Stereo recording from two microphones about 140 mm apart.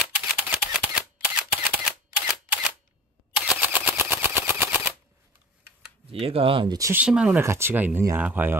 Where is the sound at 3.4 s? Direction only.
10° right (ahead or behind).